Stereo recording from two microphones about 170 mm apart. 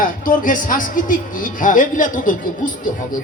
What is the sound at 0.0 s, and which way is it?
A woman's voice, 55° left (ahead or behind).